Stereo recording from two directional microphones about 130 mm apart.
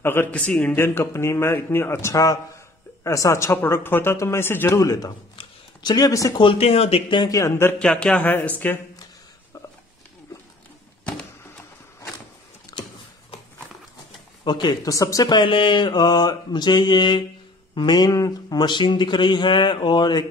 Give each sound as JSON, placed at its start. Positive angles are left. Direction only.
{"t": 0.0, "sound": "a man's voice", "side_deg": 15}
{"t": 5.3, "sound": "speech", "side_deg": 35}
{"t": 6.4, "sound": "speech", "side_deg": 50}
{"t": 7.1, "sound": "speech", "side_deg": 40}
{"t": 7.3, "sound": "a man's voice", "side_deg": 20}
{"t": 7.8, "sound": "speech", "side_deg": 10}
{"t": 12.7, "sound": "a sound", "side_deg": 25}
{"t": 14.4, "sound": "speech", "side_deg": 35}